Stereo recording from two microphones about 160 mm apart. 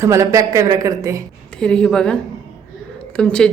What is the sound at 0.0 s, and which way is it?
A woman's voice, 20° right (ahead or behind).